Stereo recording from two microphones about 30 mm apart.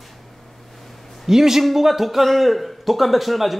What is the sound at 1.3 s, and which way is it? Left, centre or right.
Speech, centre.